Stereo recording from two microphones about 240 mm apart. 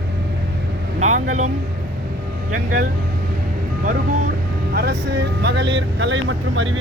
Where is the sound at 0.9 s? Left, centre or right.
Right.